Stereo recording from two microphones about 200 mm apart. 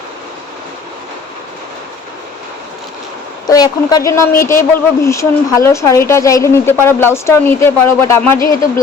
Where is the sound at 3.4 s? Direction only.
20° left (ahead or behind).